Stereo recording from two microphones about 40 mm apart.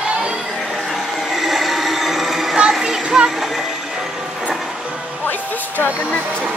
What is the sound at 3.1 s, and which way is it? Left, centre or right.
Music, centre.